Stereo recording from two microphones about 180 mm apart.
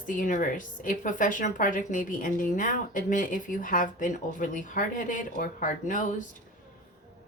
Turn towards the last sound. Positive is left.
turn(degrees=45)  # may be behind; listen again after turning